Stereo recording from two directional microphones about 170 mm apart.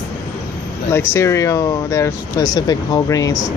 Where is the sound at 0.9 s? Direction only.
15° left (ahead or behind).